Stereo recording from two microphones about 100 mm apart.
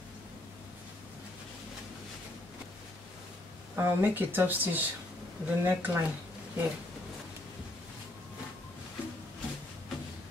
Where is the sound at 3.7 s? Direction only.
20° right (ahead or behind).